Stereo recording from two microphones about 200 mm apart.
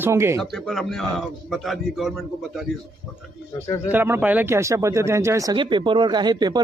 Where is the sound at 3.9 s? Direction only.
10° right (ahead or behind).